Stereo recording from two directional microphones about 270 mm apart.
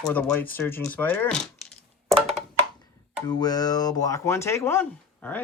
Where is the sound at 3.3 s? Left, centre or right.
Centre.